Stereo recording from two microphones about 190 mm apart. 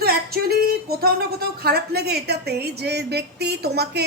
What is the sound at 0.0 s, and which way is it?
Speech, 55° right (ahead or behind).